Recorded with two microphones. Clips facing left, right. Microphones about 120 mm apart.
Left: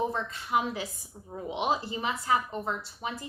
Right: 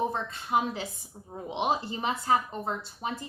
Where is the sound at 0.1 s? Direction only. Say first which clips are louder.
Right 1 dB; 30° right (ahead or behind).